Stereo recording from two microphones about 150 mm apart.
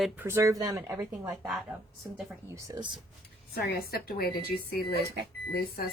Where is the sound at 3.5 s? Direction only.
90° left.